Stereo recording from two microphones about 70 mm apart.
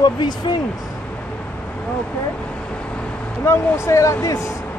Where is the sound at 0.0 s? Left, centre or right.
Left.